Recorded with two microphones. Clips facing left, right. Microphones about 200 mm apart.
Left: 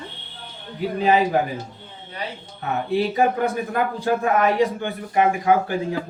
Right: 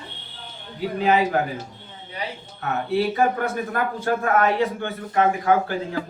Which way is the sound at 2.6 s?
15° left (ahead or behind).